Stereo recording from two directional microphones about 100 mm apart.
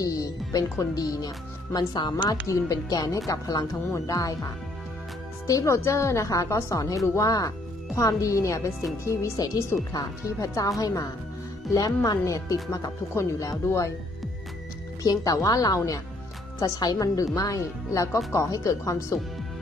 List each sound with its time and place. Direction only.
0.0 s speech: 35° left (ahead or behind)
5.5 s speech: 30° left (ahead or behind)
15.0 s speech: 35° left (ahead or behind)